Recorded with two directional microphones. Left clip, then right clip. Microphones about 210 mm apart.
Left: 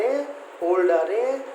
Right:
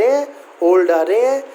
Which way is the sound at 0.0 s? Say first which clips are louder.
Right 9 dB; 50° right (ahead or behind).